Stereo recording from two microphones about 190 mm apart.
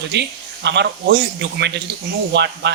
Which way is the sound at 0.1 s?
65° right (ahead or behind).